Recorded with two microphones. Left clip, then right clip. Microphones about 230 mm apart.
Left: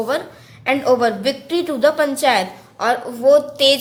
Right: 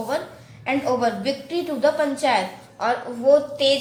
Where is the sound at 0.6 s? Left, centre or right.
Left.